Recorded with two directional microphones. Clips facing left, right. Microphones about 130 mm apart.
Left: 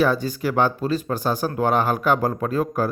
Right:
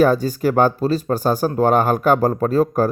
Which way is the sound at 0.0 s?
45° right (ahead or behind).